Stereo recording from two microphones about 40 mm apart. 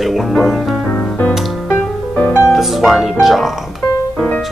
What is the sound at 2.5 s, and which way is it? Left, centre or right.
Speech, centre.